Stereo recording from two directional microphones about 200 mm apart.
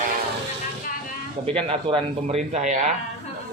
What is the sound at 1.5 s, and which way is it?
A man's voice, 30° right (ahead or behind).